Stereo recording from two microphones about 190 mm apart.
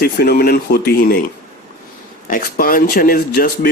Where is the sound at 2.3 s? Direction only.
50° left (ahead or behind).